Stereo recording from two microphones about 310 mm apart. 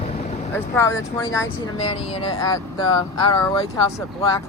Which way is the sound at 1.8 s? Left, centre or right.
Left.